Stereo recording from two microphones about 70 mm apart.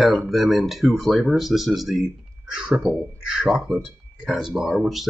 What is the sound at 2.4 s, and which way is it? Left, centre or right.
Speech, centre.